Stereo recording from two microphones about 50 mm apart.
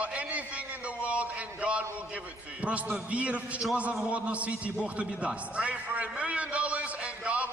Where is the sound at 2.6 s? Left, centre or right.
Right.